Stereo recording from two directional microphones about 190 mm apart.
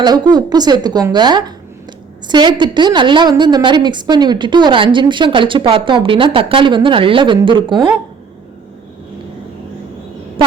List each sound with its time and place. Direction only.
0.0 s a woman's voice: 20° right (ahead or behind)